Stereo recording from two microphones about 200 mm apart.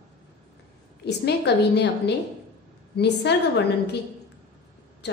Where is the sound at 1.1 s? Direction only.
60° left (ahead or behind).